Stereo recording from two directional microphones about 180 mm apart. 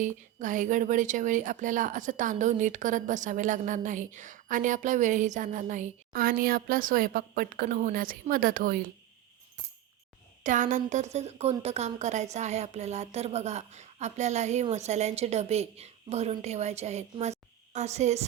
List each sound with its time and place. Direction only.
0.0 s a woman's voice: 45° right (ahead or behind)
10.4 s a woman's voice: 45° right (ahead or behind)